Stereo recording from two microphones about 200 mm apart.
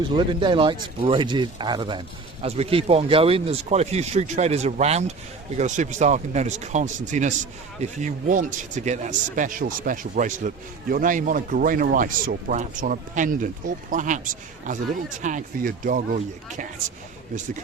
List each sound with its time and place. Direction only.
0.2 s speech: 25° right (ahead or behind); by 16.0 s 40° right (ahead or behind)